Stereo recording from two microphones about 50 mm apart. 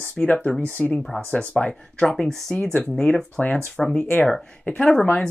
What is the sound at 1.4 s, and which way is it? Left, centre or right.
Speech, left.